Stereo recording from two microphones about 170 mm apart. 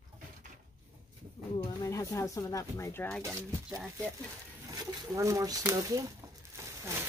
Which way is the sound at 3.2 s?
15° right (ahead or behind).